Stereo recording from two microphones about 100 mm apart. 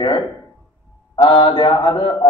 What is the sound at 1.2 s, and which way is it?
A man's voice, 60° left (ahead or behind).